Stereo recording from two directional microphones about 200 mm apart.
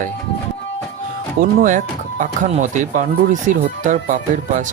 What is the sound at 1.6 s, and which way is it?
Speech, 40° right (ahead or behind).